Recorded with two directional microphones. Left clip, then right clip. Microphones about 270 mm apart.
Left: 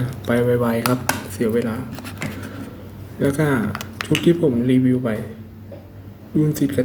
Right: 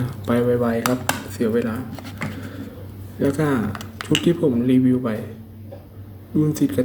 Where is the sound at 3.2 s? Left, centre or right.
Centre.